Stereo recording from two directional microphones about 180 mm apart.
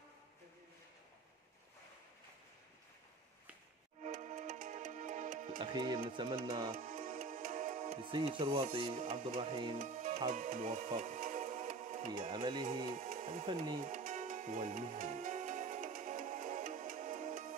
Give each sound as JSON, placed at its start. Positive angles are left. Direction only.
{"t": 4.0, "sound": "music", "side_deg": -40}
{"t": 5.6, "sound": "speech", "side_deg": -25}
{"t": 6.7, "sound": "music", "side_deg": -50}
{"t": 8.0, "sound": "speech", "side_deg": -25}
{"t": 9.0, "sound": "speech", "side_deg": -50}
{"t": 9.4, "sound": "speech", "side_deg": -30}
{"t": 9.8, "sound": "music", "side_deg": -50}
{"t": 10.3, "sound": "speech", "side_deg": -45}
{"t": 11.0, "sound": "music", "side_deg": -50}
{"t": 12.3, "sound": "speech", "side_deg": -25}
{"t": 12.9, "sound": "speech", "side_deg": -50}
{"t": 13.8, "sound": "music", "side_deg": -45}